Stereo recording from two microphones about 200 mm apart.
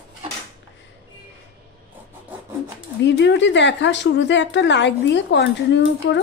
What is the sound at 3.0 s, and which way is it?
Speech, 60° left (ahead or behind).